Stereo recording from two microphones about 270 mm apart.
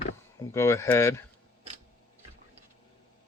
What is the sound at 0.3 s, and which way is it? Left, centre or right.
Speech, centre.